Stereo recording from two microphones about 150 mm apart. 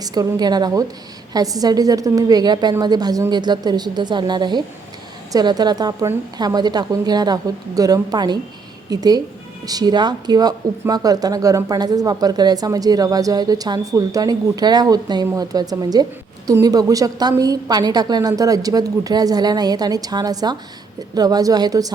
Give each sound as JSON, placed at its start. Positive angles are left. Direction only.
{"t": 0.0, "sound": "speech", "side_deg": -25}